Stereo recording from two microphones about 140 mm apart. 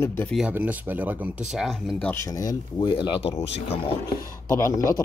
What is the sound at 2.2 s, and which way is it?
Speech, 25° left (ahead or behind).